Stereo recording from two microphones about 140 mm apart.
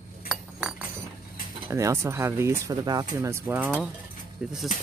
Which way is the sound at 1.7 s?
20° right (ahead or behind).